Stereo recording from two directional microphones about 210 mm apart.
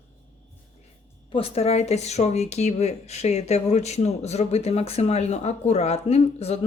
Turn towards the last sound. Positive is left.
turn(degrees=30)  # may be behind; listen again after turning